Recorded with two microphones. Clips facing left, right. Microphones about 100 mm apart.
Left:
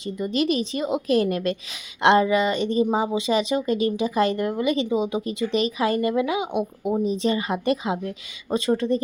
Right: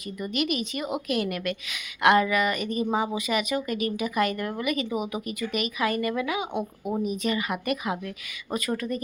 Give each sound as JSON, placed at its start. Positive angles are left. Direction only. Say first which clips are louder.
{"t": 0.2, "sound": "a woman's voice", "louder": "left 5 dB", "side_deg": 30}